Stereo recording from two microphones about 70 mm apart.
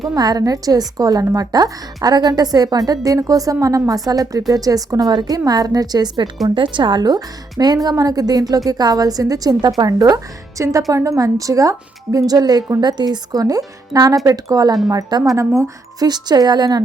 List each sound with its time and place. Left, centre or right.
0.2 s a woman's voice: right
12.8 s a woman's voice: right
13.4 s a woman's voice: right
15.4 s a woman's voice: right
16.0 s a woman's voice: right